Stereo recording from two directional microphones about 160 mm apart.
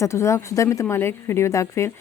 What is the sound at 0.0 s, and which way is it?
A woman's voice, 20° left (ahead or behind).